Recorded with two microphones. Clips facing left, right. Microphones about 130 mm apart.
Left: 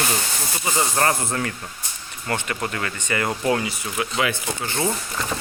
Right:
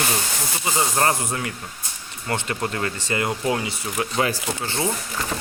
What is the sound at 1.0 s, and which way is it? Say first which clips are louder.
Speech: left 1 dB; 25° right (ahead or behind).